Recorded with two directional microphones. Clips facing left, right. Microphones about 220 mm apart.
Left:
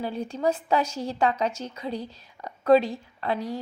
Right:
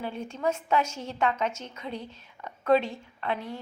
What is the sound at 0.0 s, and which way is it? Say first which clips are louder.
A woman's voice: left 4 dB; 35° left (ahead or behind).